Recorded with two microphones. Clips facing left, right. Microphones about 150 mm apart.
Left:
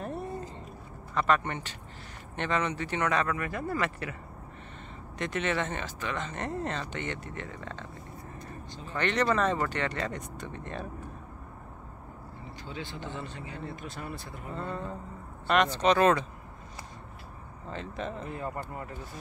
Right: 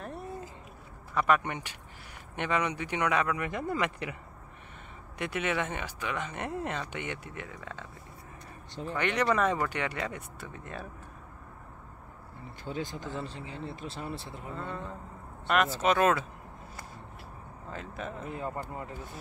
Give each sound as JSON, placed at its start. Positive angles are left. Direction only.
{"t": 1.1, "sound": "speech", "side_deg": -10}
{"t": 5.2, "sound": "speech", "side_deg": -10}
{"t": 8.9, "sound": "speech", "side_deg": -10}
{"t": 12.6, "sound": "speech", "side_deg": -45}
{"t": 14.5, "sound": "speech", "side_deg": 0}
{"t": 17.6, "sound": "speech", "side_deg": -5}
{"t": 18.6, "sound": "speech", "side_deg": -15}